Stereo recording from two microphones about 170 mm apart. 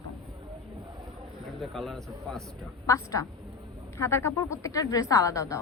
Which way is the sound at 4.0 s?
15° left (ahead or behind).